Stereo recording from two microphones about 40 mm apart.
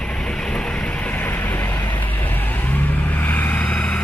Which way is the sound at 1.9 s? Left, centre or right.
Left.